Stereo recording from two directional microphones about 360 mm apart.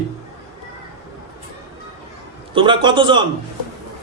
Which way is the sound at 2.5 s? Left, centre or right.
Centre.